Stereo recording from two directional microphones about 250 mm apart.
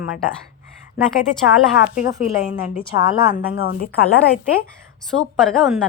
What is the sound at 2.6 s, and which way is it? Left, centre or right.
Speech, left.